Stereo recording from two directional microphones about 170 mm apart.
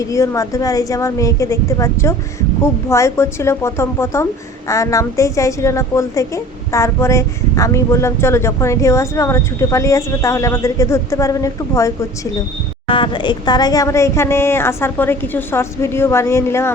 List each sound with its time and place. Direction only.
0.0 s a woman's voice: 20° left (ahead or behind)
12.9 s a woman's voice: 30° left (ahead or behind)